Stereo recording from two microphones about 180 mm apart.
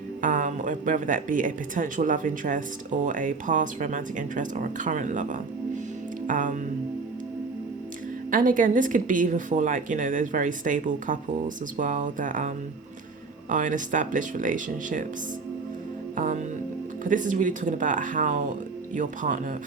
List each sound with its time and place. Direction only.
0.2 s speech: 45° right (ahead or behind)
8.3 s speech: 50° right (ahead or behind)
16.1 s speech: 45° right (ahead or behind)